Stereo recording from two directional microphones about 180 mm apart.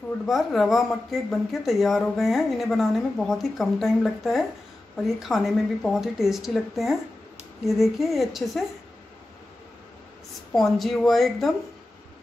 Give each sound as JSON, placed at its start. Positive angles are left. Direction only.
{"t": 0.3, "sound": "a woman's voice", "side_deg": 0}
{"t": 10.5, "sound": "a woman's voice", "side_deg": 0}